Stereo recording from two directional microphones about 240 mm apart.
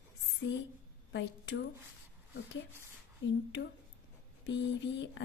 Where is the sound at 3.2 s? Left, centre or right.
Left.